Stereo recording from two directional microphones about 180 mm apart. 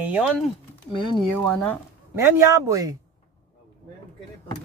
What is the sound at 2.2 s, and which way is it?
Speech, 15° right (ahead or behind).